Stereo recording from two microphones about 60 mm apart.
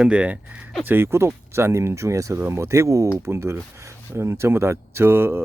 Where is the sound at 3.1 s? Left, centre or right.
Right.